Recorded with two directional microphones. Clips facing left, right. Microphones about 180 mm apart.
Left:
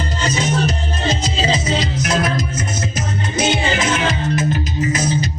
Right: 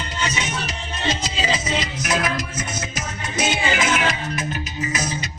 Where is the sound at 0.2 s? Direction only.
40° left (ahead or behind).